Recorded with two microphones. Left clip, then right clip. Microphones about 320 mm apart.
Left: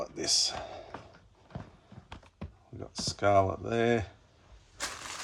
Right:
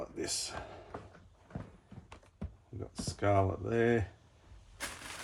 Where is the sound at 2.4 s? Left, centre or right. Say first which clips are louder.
Even; centre.